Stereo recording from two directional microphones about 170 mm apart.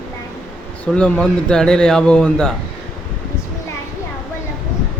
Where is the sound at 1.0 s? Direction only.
5° left (ahead or behind).